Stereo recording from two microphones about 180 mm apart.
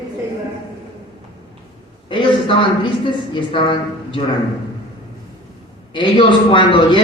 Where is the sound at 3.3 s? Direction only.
30° left (ahead or behind).